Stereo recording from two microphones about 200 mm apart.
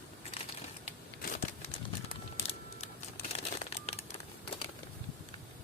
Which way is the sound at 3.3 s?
30° left (ahead or behind).